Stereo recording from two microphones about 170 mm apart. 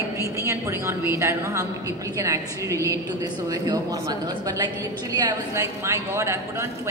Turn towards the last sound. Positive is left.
turn(degrees=-20)  # may be behind; listen again after turning